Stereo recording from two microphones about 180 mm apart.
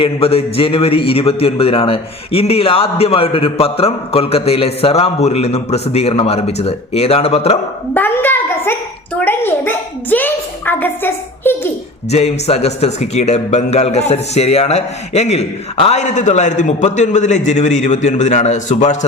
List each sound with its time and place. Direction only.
0.0 s a man's voice: 30° left (ahead or behind)
7.9 s a woman's voice: 10° left (ahead or behind)
12.1 s a man's voice: 35° left (ahead or behind)